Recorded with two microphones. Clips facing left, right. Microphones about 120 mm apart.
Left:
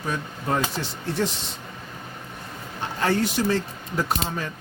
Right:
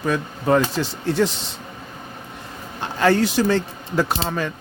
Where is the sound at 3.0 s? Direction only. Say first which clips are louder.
Right 5 dB; 90° right.